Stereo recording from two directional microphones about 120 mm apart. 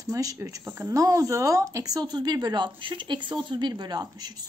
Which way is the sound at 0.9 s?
25° right (ahead or behind).